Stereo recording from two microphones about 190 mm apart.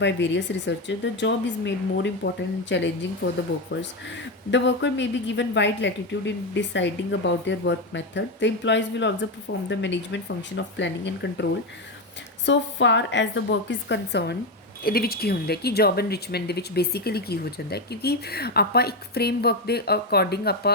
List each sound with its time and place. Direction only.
0.0 s speech: 70° left (ahead or behind)
4.5 s speech: 70° left (ahead or behind)
12.5 s speech: 70° left (ahead or behind)